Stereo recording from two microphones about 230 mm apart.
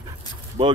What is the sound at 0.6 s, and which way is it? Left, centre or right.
Speech, right.